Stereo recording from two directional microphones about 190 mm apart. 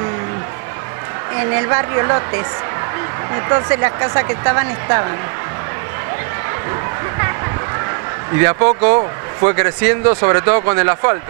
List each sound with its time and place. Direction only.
1.5 s speech: 20° right (ahead or behind)
3.4 s speech: 20° right (ahead or behind)
8.4 s speech: 20° right (ahead or behind)